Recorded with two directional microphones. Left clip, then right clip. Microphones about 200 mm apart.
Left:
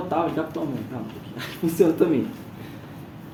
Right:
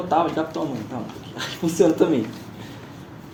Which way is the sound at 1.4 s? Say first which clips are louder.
Right 2 dB; 40° right (ahead or behind).